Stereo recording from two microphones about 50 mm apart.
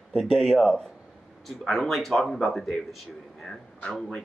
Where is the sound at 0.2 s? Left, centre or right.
Centre.